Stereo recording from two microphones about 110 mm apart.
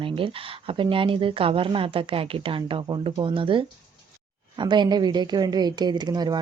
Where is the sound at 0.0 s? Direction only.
55° right (ahead or behind).